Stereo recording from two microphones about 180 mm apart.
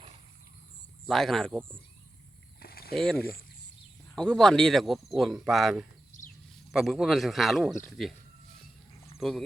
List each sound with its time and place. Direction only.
1.0 s speech: centre (ahead or behind)
2.6 s a sound: 60° left (ahead or behind)
2.9 s speech: 5° left (ahead or behind)
9.1 s speech: centre (ahead or behind)